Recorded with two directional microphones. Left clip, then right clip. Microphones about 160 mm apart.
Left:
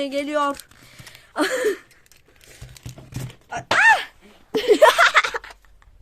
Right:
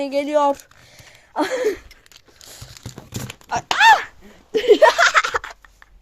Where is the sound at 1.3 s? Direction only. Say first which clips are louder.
Right 1 dB; 15° left (ahead or behind).